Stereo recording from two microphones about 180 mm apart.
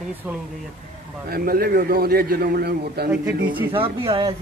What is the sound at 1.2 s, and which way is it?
A man's voice, 55° right (ahead or behind).